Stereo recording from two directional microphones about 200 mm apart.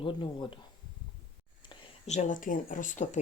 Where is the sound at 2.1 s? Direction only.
40° left (ahead or behind).